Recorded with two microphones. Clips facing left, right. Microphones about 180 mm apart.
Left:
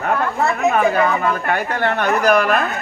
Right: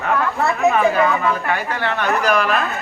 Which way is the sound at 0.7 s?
45° left (ahead or behind).